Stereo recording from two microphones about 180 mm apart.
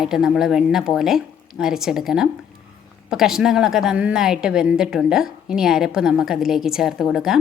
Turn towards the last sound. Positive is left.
turn(degrees=0)  # may be behind; listen again after turning